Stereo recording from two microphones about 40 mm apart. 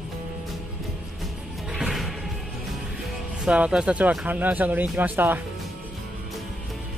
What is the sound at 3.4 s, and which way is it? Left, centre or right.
Speech, right.